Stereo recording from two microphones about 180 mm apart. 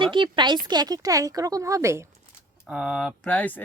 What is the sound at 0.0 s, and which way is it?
Speech, 25° right (ahead or behind).